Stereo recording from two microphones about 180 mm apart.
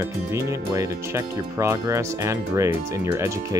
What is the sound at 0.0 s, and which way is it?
Speech, 15° right (ahead or behind).